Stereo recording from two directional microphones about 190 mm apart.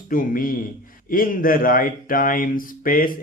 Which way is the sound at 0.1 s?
45° left (ahead or behind).